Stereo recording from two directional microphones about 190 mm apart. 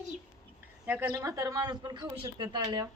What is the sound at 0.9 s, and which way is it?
Speech, 15° right (ahead or behind).